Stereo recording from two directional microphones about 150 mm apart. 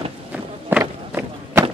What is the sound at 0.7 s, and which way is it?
Run, 15° right (ahead or behind).